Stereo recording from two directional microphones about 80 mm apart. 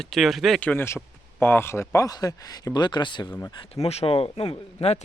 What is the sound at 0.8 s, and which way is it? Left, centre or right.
Speech, left.